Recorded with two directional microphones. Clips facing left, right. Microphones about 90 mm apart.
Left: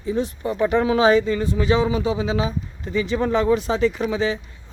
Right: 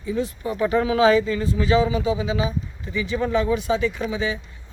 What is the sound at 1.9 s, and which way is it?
A man's voice, 40° left (ahead or behind).